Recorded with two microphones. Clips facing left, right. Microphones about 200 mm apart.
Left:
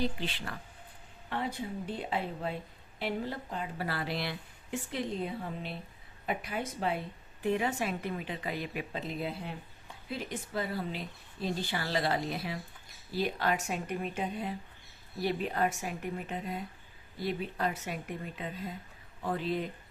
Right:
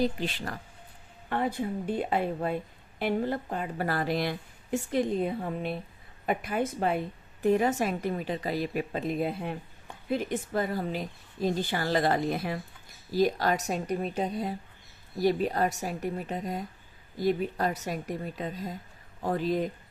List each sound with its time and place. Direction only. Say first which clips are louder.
0.0 s a woman's voice: right 5 dB; 45° right (ahead or behind)